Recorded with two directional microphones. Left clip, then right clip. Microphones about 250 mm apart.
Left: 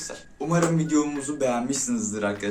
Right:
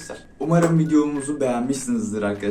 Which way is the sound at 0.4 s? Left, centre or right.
Centre.